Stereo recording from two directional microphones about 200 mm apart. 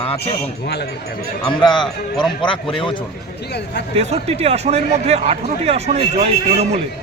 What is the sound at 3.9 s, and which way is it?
A man's voice, 30° right (ahead or behind).